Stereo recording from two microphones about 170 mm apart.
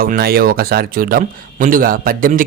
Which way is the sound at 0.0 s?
60° right (ahead or behind).